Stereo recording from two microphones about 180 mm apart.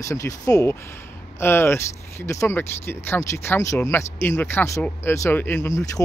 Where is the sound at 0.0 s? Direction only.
15° left (ahead or behind).